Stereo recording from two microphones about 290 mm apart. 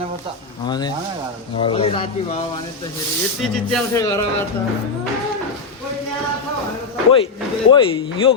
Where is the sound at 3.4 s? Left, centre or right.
Centre.